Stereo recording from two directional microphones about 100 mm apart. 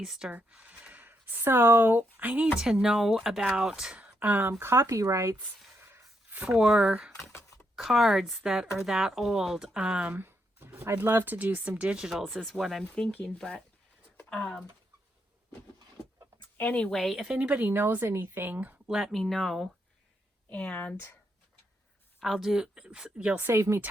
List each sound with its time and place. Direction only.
0.0 s speech: 5° right (ahead or behind)
2.6 s speech: 5° right (ahead or behind); by 5.4 s 30° right (ahead or behind)
5.8 s a sound: 25° right (ahead or behind)
6.4 s speech: 5° right (ahead or behind)
12.8 s speech: 10° left (ahead or behind)
16.6 s speech: 15° left (ahead or behind)
17.3 s a woman's voice: 15° right (ahead or behind)
18.9 s speech: 5° right (ahead or behind)
20.5 s speech: 15° left (ahead or behind)
22.2 s speech: centre (ahead or behind)
23.4 s a woman's voice: 25° right (ahead or behind)